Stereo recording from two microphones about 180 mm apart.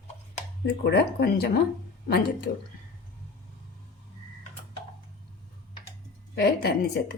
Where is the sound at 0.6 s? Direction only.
70° left (ahead or behind).